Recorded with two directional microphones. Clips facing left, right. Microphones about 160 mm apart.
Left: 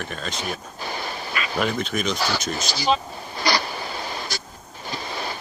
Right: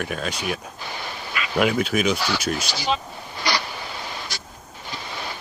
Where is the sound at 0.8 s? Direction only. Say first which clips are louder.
Left 4 dB; 40° left (ahead or behind).